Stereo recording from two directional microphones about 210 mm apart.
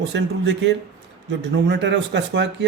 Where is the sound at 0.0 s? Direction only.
55° right (ahead or behind).